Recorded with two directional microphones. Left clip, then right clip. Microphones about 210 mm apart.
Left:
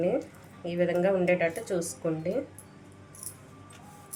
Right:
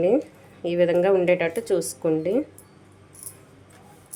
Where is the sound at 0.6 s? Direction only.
50° right (ahead or behind).